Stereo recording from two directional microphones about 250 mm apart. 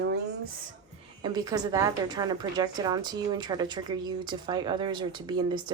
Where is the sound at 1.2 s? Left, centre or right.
Centre.